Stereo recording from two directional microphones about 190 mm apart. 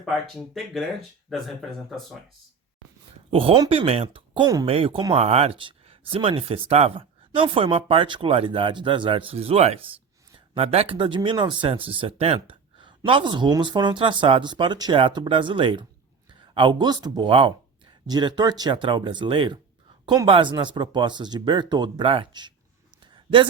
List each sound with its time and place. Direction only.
0.0 s speech: centre (ahead or behind)
3.3 s speech: 25° right (ahead or behind)
23.1 s a sound: 25° right (ahead or behind)